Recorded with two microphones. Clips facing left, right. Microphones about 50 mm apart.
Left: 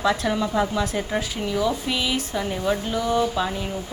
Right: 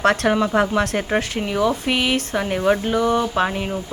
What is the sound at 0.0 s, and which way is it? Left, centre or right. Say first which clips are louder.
Speech: right 5 dB; right.